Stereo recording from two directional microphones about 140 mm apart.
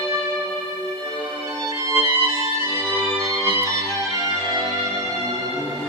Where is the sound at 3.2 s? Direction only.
25° right (ahead or behind).